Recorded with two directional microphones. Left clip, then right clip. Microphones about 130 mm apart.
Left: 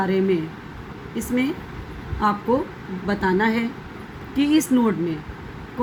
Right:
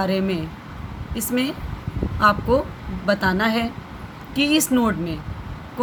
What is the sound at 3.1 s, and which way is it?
Speech, 50° right (ahead or behind).